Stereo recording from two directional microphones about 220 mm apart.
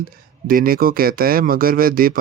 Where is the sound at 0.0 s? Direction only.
40° right (ahead or behind).